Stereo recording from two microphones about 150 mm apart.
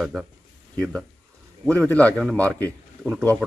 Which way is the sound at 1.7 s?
10° left (ahead or behind).